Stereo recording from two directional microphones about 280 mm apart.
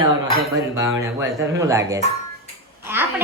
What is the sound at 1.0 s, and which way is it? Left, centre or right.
A woman's voice, centre.